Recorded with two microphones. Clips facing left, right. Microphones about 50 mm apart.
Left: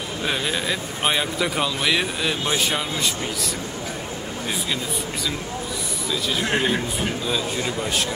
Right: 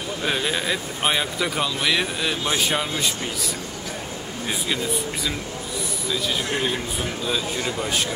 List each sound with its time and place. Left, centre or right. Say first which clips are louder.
0.2 s speech: even; centre
6.4 s a man's voice: left 3 dB; left